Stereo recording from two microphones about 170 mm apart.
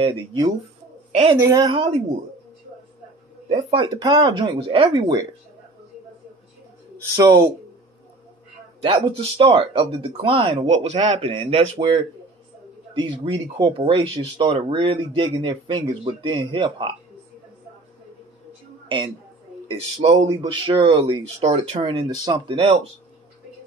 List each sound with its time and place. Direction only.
0.0 s speech: 25° right (ahead or behind)
3.4 s speech: 35° right (ahead or behind)
7.2 s speech: 15° right (ahead or behind)
8.8 s speech: 30° right (ahead or behind)
18.9 s a woman's voice: 30° right (ahead or behind)